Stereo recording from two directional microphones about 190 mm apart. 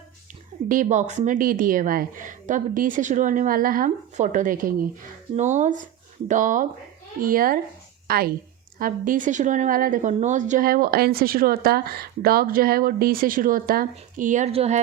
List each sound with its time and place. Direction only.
0.7 s a woman's voice: 45° right (ahead or behind)